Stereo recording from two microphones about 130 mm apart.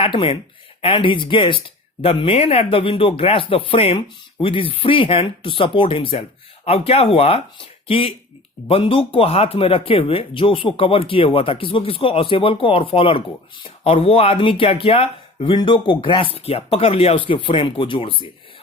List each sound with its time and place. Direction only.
0.0 s speech: 45° left (ahead or behind)